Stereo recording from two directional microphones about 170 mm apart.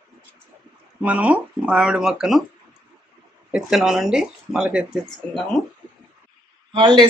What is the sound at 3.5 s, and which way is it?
Speech, 5° right (ahead or behind).